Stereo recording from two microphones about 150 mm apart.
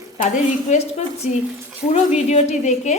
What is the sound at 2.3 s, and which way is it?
Speech, 50° left (ahead or behind).